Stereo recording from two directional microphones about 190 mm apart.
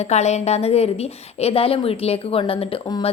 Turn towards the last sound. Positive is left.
turn(degrees=30)  # may be behind; listen again after turning